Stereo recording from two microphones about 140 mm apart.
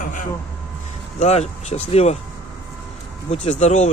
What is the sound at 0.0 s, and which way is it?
Vehicle, 70° left (ahead or behind).